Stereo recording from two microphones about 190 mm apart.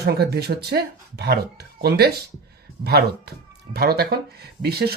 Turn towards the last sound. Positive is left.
turn(degrees=-55)  # may be behind; listen again after turning